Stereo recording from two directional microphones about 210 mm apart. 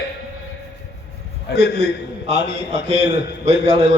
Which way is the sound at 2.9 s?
30° right (ahead or behind).